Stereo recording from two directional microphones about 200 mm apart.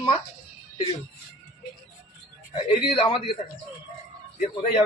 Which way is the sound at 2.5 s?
25° left (ahead or behind).